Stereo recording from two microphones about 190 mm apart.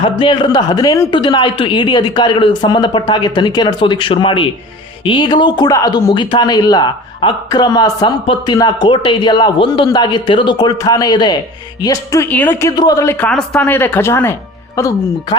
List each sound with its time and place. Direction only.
0.0 s speech: 25° left (ahead or behind)